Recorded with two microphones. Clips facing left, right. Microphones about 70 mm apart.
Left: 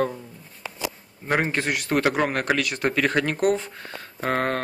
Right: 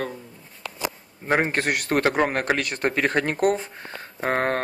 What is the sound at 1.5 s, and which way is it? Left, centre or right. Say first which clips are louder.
Speech: right 1 dB; right.